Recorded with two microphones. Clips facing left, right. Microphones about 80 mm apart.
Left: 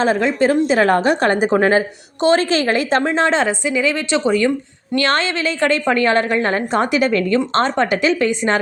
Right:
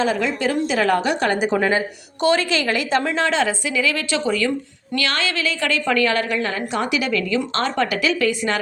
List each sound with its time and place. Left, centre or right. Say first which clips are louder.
0.0 s a woman's voice: left 5 dB; left